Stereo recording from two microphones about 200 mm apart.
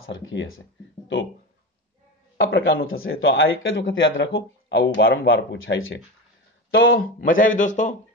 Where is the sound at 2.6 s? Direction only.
85° left.